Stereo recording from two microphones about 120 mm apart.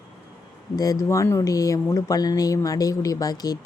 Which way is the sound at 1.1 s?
25° left (ahead or behind).